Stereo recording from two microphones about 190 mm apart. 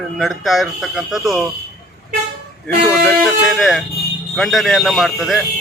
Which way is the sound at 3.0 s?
Centre (ahead or behind).